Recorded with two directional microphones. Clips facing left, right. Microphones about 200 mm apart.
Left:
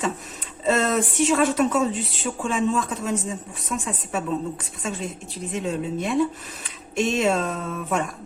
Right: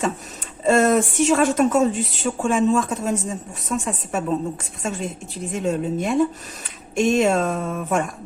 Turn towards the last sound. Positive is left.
turn(degrees=-50)  # may be behind; listen again after turning